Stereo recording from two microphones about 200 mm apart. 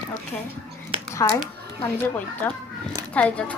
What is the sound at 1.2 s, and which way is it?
A woman's voice, 15° left (ahead or behind).